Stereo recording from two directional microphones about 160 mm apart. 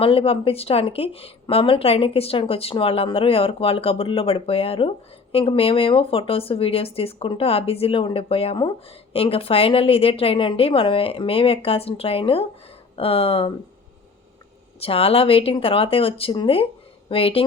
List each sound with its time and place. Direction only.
0.0 s a woman's voice: 35° left (ahead or behind)
14.8 s a woman's voice: 35° left (ahead or behind)